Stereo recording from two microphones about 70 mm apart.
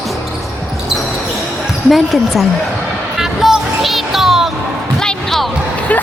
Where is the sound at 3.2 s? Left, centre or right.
Centre.